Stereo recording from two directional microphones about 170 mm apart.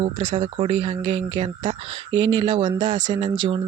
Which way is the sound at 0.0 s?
30° right (ahead or behind).